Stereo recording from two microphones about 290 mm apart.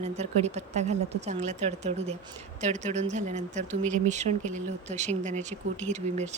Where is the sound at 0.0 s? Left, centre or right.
Right.